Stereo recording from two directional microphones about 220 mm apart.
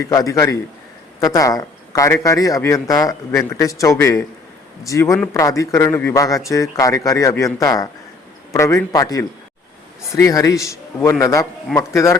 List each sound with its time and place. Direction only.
0.0 s a man's voice: 15° left (ahead or behind)